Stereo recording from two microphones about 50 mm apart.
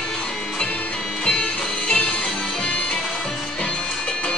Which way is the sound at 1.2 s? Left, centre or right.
Centre.